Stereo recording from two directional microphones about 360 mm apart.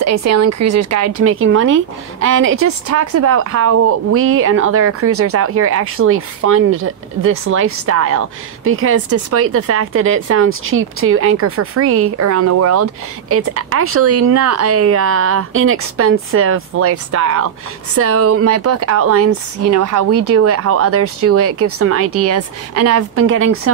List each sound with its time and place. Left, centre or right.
0.0 s speech: right